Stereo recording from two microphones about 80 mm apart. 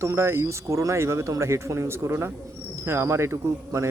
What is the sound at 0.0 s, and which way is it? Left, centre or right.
A man's voice, right.